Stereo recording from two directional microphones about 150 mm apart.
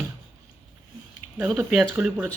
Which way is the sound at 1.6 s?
10° right (ahead or behind).